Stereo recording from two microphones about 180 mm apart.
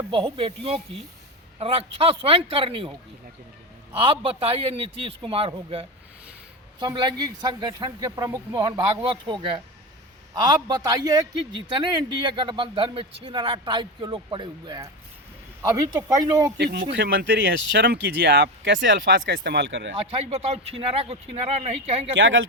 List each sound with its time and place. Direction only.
0.1 s speech: 30° right (ahead or behind)
3.9 s speech: 30° right (ahead or behind)
16.9 s speech: 75° right (ahead or behind)
20.1 s speech: 35° right (ahead or behind)
22.1 s speech: 90° right